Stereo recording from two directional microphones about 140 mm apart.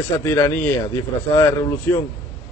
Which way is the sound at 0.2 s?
20° left (ahead or behind).